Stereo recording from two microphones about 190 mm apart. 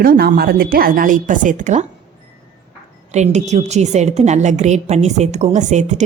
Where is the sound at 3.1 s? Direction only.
35° right (ahead or behind).